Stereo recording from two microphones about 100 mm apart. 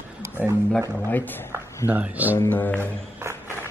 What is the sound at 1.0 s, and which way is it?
Speech, 20° left (ahead or behind).